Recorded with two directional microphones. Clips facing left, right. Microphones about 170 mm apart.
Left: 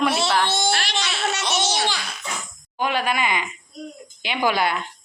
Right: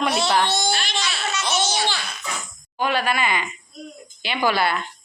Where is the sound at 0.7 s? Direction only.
70° left (ahead or behind).